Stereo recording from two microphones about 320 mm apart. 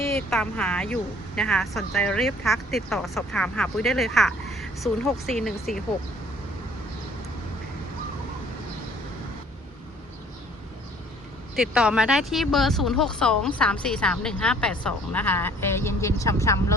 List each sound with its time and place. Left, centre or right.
0.0 s speech: centre
11.5 s speech: centre